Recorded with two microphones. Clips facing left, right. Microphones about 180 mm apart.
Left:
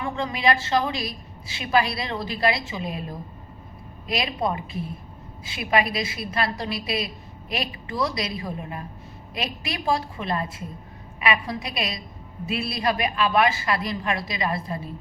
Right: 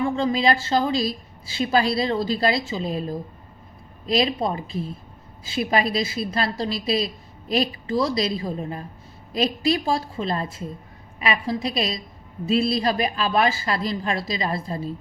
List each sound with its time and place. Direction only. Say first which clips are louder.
0.0 s a woman's voice: right 4 dB; 30° right (ahead or behind)
4.0 s a woman's voice: right 4 dB; 35° right (ahead or behind)